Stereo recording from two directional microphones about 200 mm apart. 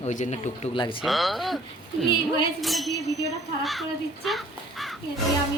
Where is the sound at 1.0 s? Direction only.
Centre (ahead or behind).